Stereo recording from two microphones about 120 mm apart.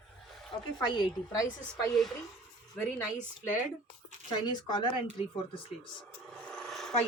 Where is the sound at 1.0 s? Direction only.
30° left (ahead or behind).